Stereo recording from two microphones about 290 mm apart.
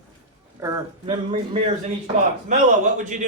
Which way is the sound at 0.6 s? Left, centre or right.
Centre.